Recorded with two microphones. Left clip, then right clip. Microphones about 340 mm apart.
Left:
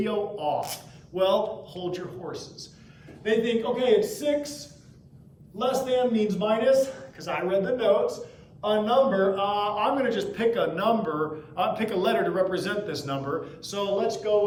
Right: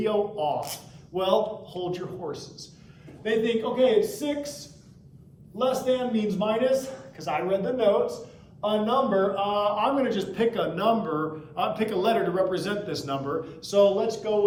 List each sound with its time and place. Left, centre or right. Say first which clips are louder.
0.0 s a man's voice: right 2 dB; centre
5.5 s a man's voice: even; centre